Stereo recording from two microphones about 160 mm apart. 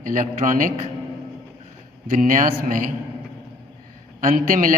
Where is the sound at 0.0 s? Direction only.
55° right (ahead or behind).